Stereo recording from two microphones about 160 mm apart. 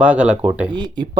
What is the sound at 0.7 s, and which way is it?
Speech, 30° right (ahead or behind).